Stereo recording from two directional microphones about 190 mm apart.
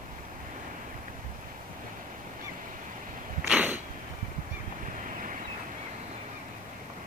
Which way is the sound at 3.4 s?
5° right (ahead or behind).